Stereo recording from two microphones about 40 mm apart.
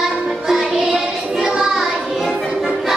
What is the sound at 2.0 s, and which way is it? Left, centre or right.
Music, centre.